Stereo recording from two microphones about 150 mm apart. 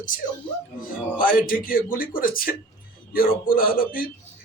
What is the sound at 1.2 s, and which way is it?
A man's voice, 70° left (ahead or behind).